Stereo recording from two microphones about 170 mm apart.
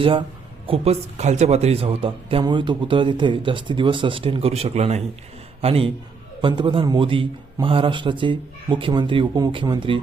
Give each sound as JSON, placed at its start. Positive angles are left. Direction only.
{"t": 0.0, "sound": "a man's voice", "side_deg": -30}